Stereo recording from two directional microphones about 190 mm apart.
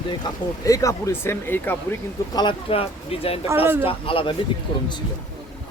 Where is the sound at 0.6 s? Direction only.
15° left (ahead or behind).